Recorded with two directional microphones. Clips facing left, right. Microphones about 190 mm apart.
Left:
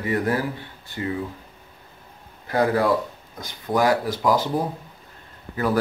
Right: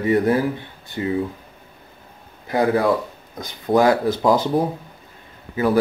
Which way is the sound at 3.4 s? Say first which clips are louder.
Right 5 dB; 25° right (ahead or behind).